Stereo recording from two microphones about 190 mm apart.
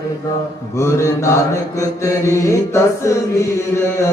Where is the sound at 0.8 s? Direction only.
15° left (ahead or behind).